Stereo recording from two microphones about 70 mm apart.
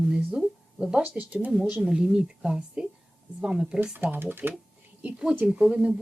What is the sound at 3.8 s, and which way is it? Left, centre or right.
Speech, right.